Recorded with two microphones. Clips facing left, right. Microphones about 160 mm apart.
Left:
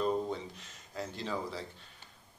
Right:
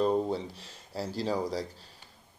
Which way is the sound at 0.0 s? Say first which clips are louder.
Right 5 dB; 35° right (ahead or behind).